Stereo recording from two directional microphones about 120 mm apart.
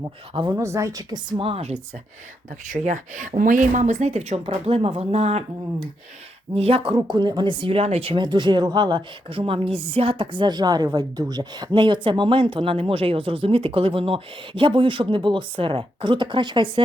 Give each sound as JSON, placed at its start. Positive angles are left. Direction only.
{"t": 0.5, "sound": "a woman's voice", "side_deg": -25}
{"t": 1.5, "sound": "speech", "side_deg": -55}
{"t": 2.6, "sound": "speech", "side_deg": -90}
{"t": 6.6, "sound": "speech", "side_deg": -50}
{"t": 7.1, "sound": "speech", "side_deg": -35}